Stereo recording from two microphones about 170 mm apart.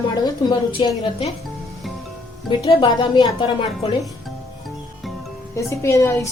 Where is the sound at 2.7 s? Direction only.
30° left (ahead or behind).